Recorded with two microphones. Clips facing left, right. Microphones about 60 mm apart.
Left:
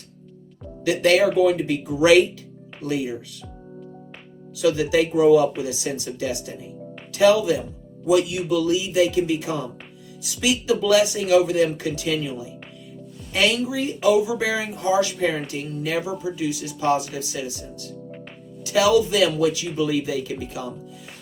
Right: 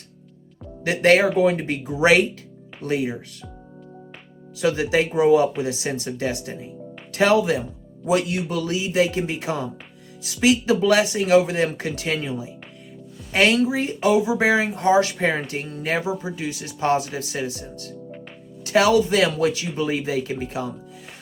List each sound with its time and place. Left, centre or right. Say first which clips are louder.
0.9 s speech: right 1 dB; right
4.5 s speech: left 1 dB; right